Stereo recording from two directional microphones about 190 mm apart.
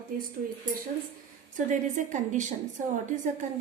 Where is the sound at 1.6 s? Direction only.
40° right (ahead or behind).